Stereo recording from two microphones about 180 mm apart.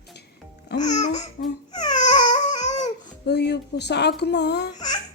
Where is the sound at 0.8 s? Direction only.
40° left (ahead or behind).